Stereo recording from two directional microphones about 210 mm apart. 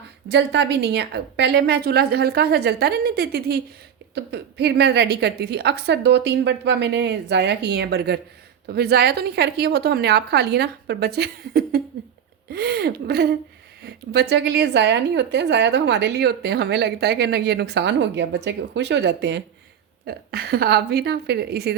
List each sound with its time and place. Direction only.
0.3 s a woman's voice: 55° right (ahead or behind)